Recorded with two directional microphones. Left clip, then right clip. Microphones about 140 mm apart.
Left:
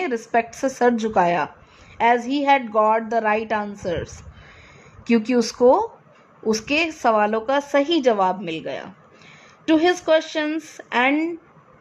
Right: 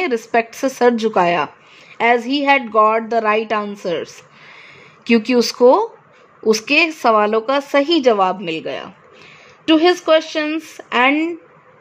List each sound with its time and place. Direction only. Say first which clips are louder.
0.0 s a woman's voice: right 4 dB; 35° right (ahead or behind)